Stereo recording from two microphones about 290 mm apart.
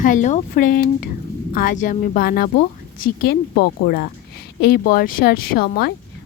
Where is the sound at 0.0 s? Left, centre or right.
Left.